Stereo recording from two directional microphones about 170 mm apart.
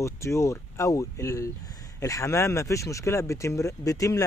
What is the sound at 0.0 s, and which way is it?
Speech, 15° left (ahead or behind).